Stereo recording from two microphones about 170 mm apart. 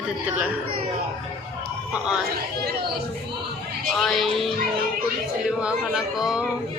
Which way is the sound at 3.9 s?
Centre (ahead or behind).